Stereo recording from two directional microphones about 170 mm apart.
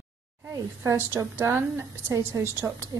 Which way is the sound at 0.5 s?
20° right (ahead or behind).